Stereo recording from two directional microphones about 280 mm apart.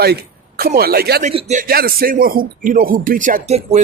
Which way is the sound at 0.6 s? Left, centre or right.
Right.